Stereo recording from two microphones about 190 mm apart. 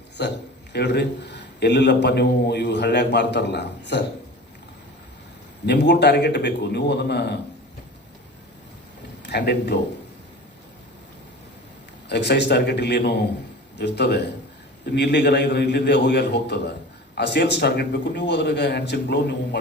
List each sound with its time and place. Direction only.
0.2 s a man's voice: 65° left (ahead or behind)
5.6 s a man's voice: 65° left (ahead or behind)
9.2 s a man's voice: 60° left (ahead or behind)
12.0 s a man's voice: 60° left (ahead or behind)